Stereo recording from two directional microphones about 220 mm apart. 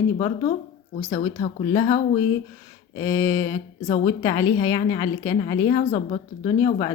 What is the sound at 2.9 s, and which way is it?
A woman's voice, 15° left (ahead or behind).